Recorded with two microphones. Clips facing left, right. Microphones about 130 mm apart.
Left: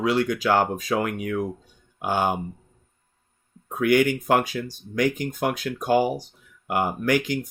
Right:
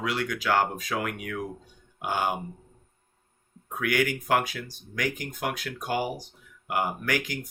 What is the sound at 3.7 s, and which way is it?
Speech, 25° left (ahead or behind).